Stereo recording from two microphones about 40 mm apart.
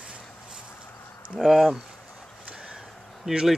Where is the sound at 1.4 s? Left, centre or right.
Centre.